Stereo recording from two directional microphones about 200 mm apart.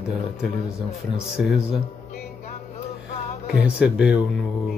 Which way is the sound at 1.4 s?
5° right (ahead or behind).